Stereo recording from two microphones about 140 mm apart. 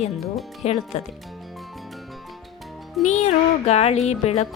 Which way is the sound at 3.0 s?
55° left (ahead or behind).